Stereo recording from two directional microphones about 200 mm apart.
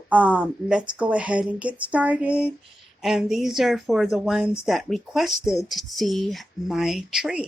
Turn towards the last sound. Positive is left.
turn(degrees=0)  # may be behind; listen again after turning